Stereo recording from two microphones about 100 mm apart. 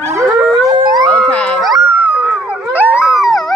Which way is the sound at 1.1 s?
10° left (ahead or behind).